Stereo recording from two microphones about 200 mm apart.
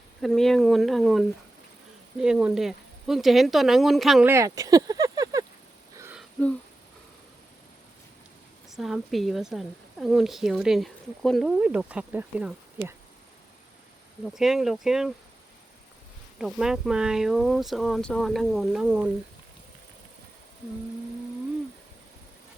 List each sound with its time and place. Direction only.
0.2 s a woman's voice: centre (ahead or behind)
4.3 s a sound: 15° right (ahead or behind)
8.7 s a woman's voice: centre (ahead or behind)
14.3 s a woman's voice: centre (ahead or behind)
16.4 s a woman's voice: centre (ahead or behind)